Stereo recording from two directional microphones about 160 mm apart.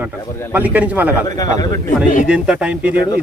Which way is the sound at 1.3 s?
20° left (ahead or behind).